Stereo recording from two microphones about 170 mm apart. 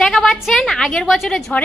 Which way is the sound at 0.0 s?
Centre (ahead or behind).